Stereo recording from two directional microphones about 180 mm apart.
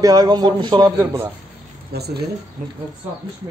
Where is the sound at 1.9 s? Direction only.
65° right (ahead or behind).